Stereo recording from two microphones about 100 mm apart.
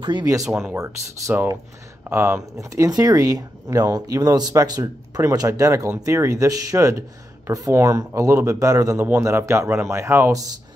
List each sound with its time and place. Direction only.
0.0 s speech: 50° right (ahead or behind)
0.7 s speech: 30° right (ahead or behind)